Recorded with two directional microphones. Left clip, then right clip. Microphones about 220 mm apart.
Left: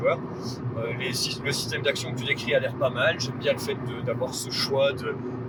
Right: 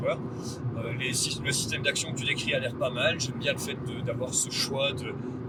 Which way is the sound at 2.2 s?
25° right (ahead or behind).